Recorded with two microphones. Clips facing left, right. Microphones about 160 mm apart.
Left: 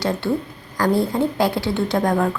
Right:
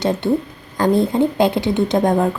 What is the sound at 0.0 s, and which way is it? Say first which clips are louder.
A woman's voice: right 4 dB; 20° right (ahead or behind).